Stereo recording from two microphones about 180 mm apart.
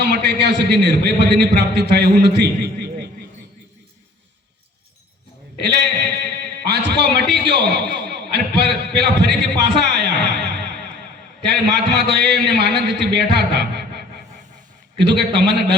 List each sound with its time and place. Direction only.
0.0 s a man's voice: 70° right (ahead or behind)
5.5 s a man's voice: 70° right (ahead or behind)